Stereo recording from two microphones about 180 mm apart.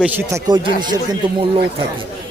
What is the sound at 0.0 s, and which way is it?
Speech, 15° right (ahead or behind).